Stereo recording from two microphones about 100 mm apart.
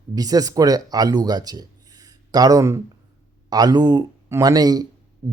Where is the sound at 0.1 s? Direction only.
40° right (ahead or behind).